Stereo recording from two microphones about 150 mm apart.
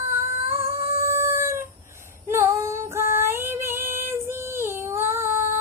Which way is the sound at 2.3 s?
20° right (ahead or behind).